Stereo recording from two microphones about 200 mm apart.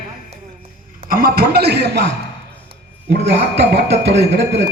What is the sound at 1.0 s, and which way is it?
Speech, 45° right (ahead or behind).